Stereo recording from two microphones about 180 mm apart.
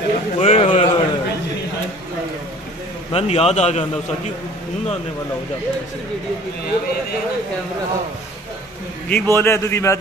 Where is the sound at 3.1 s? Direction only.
35° left (ahead or behind).